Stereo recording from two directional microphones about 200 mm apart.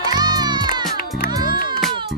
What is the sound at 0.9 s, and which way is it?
Music, 50° left (ahead or behind).